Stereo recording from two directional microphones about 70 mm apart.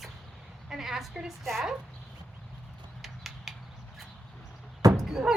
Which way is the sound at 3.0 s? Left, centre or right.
Centre.